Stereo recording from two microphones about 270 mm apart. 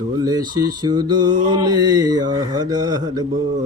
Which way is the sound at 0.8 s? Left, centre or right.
Centre.